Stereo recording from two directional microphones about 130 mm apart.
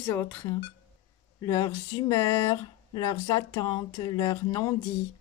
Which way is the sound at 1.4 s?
25° left (ahead or behind).